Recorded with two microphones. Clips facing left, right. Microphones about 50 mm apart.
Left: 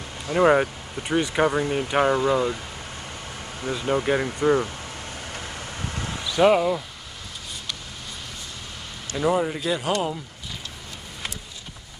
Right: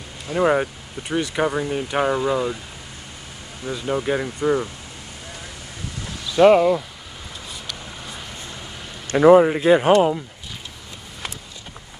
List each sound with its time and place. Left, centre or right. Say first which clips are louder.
0.3 s speech: left 1 dB; centre
3.6 s speech: even; centre
5.3 s vehicle: left 3 dB; left
6.3 s speech: right 5 dB; centre
9.1 s speech: right 11 dB; right